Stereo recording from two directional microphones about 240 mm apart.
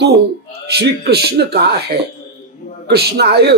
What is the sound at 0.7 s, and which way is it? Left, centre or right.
Speech, right.